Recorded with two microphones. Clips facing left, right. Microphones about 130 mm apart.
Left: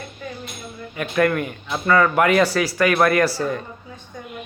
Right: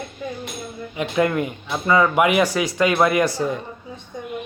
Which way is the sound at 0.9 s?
20° right (ahead or behind).